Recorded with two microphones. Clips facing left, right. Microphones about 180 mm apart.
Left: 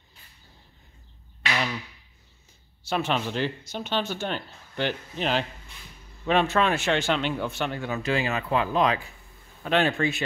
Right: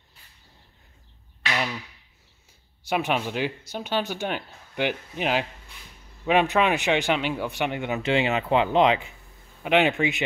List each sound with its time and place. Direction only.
2.8 s a man's voice: 15° right (ahead or behind)